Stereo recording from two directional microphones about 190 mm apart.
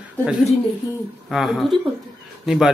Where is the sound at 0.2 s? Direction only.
5° right (ahead or behind).